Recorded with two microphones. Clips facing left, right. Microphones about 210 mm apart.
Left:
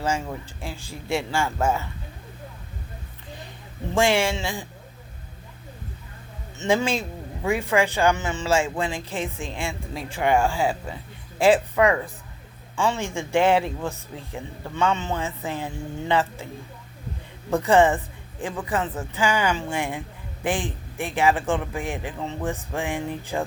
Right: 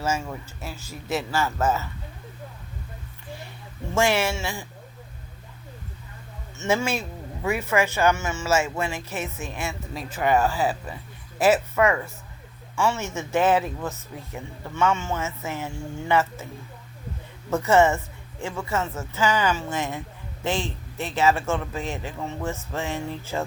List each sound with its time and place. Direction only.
0.0 s a man's voice: 15° left (ahead or behind)
3.9 s a man's voice: 15° left (ahead or behind)
6.6 s a man's voice: 15° left (ahead or behind)
17.7 s a man's voice: 15° left (ahead or behind)